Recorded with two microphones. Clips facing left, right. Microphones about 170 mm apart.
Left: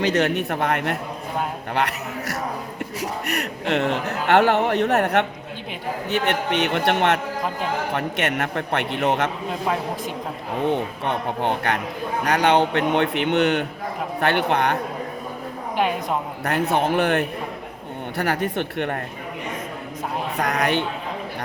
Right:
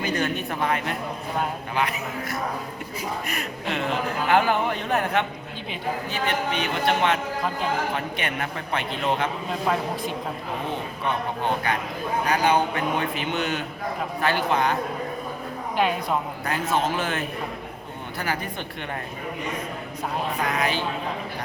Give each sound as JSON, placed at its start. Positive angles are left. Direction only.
{"t": 0.0, "sound": "a man's voice", "side_deg": 75}
{"t": 10.7, "sound": "a man's voice", "side_deg": 65}
{"t": 16.4, "sound": "a man's voice", "side_deg": 65}
{"t": 20.6, "sound": "a man's voice", "side_deg": 65}